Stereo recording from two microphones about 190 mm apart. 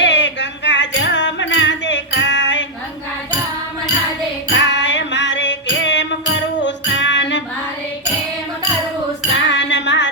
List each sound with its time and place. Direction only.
0.0 s music: 70° left (ahead or behind)
4.6 s music: 70° left (ahead or behind)
9.3 s music: 70° left (ahead or behind)